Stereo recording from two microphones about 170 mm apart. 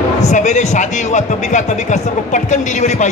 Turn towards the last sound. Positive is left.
turn(degrees=45)  # may be behind; listen again after turning